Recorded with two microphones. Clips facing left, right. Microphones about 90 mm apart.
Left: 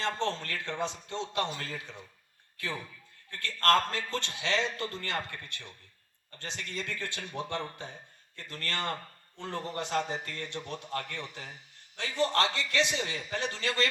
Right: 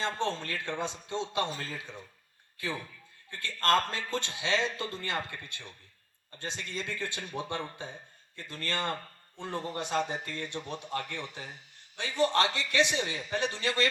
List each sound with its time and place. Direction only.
0.2 s a man's voice: 20° right (ahead or behind)
1.5 s a man's voice: 30° right (ahead or behind)
3.2 s a man's voice: 20° right (ahead or behind)